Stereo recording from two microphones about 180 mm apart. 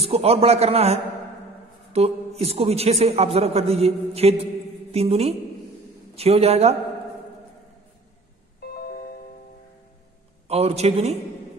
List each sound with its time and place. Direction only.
0.0 s a man's voice: 35° right (ahead or behind)
10.5 s a man's voice: 35° right (ahead or behind)